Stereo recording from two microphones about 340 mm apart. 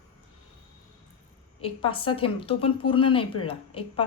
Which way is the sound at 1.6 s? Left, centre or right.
Centre.